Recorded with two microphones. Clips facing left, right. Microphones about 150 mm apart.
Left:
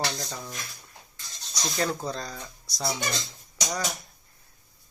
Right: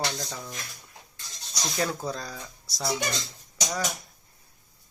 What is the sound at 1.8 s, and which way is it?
Speech, 5° right (ahead or behind).